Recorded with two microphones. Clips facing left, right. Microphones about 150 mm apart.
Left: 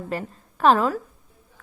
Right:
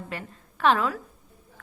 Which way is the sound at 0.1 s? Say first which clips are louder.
Left 7 dB; 40° left (ahead or behind).